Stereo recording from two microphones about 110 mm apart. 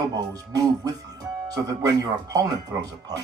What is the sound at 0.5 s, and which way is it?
Speech, 35° right (ahead or behind).